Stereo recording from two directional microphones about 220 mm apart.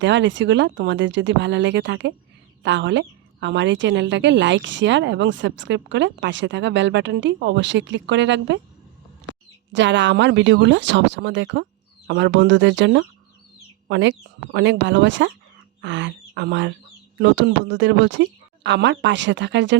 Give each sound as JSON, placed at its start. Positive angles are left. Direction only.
{"t": 0.0, "sound": "a woman's voice", "side_deg": -55}
{"t": 9.7, "sound": "a woman's voice", "side_deg": -55}